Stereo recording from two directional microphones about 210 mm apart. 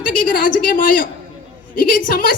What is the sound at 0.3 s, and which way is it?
A woman's voice, 40° left (ahead or behind).